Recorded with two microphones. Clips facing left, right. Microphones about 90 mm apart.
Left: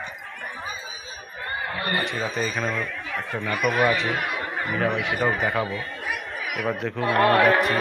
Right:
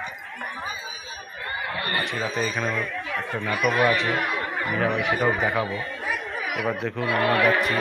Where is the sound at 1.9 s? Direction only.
Centre (ahead or behind).